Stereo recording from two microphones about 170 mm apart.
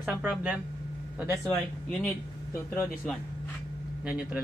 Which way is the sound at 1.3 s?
5° left (ahead or behind).